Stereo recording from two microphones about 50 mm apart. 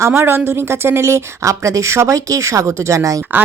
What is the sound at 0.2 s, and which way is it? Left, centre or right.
Speech, right.